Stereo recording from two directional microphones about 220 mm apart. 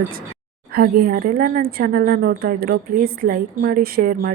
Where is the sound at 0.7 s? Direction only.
40° right (ahead or behind).